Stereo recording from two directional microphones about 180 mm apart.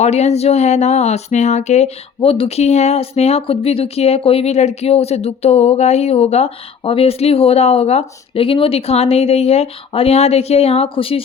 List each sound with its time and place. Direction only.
0.0 s speech: 35° left (ahead or behind)